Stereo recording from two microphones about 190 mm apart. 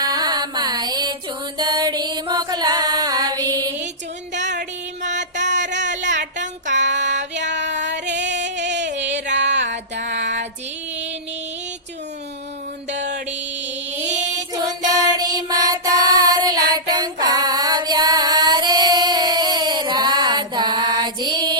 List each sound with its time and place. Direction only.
0.0 s music: 20° right (ahead or behind)
4.4 s music: 40° right (ahead or behind)
5.5 s a sound: 70° right (ahead or behind)
6.4 s female singing: 70° right (ahead or behind)
10.0 s music: 65° right (ahead or behind)
14.8 s music: 20° right (ahead or behind)